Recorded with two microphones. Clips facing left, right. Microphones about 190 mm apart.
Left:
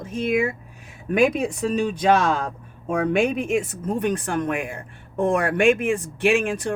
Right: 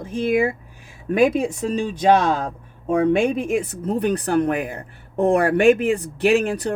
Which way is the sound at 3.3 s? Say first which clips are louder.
Right 1 dB; 35° right (ahead or behind).